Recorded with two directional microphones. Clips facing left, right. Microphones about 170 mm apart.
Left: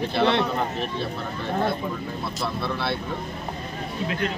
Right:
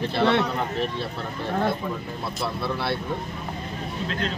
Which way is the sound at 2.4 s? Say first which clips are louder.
Even; 10° right (ahead or behind).